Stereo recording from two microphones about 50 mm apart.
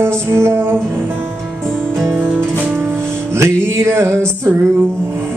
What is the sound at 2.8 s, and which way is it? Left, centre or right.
Music, right.